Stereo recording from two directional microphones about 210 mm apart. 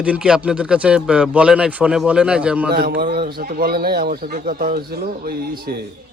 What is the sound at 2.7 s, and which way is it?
Speech, 45° right (ahead or behind).